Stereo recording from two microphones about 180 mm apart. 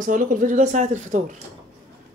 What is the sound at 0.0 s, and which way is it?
Speech, 45° right (ahead or behind).